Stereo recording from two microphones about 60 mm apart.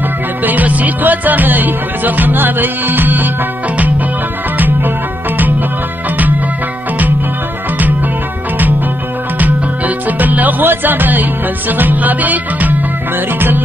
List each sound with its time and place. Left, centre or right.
0.4 s music: right
4.6 s music: right
9.4 s music: right